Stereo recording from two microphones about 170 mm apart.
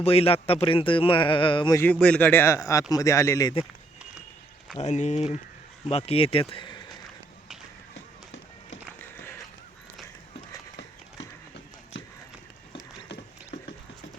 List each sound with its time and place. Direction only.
0.0 s speech: 35° left (ahead or behind)
1.8 s speech: 5° left (ahead or behind)
4.8 s speech: 40° left (ahead or behind); by 6.9 s 25° left (ahead or behind)
7.9 s music: 90° left
8.9 s music: 10° left (ahead or behind)
12.7 s a sound: 25° left (ahead or behind)